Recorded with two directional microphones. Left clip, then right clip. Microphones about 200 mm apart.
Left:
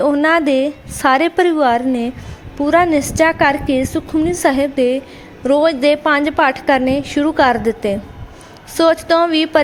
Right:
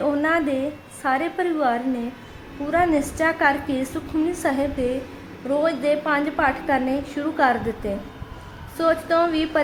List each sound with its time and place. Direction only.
0.0 s a woman's voice: 45° left (ahead or behind)